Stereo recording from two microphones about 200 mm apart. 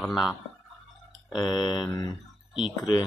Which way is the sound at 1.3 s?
25° left (ahead or behind).